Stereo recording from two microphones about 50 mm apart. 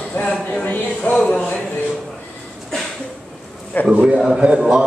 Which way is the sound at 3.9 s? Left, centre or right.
Centre.